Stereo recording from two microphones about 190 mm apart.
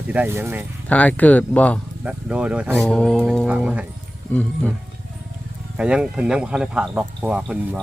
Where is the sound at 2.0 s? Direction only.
5° right (ahead or behind).